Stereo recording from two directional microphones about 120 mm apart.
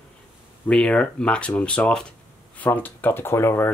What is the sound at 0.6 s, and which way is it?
Speech, 10° left (ahead or behind).